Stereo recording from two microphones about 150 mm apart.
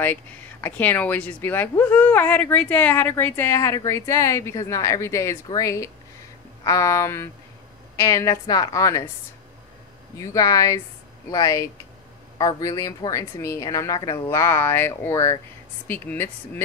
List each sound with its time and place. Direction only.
0.0 s a woman's voice: 10° left (ahead or behind)
10.1 s a woman's voice: 20° left (ahead or behind)